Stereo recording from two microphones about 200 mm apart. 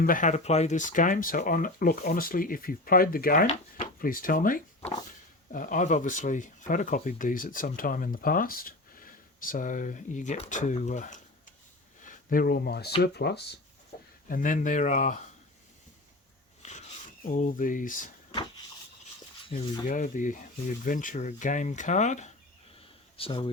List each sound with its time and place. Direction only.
0.0 s speech: 40° left (ahead or behind)
13.9 s a sound: 50° left (ahead or behind)
14.3 s speech: 40° left (ahead or behind)
16.6 s filing: 35° left (ahead or behind)
17.2 s speech: 40° left (ahead or behind)
19.5 s speech: 35° left (ahead or behind)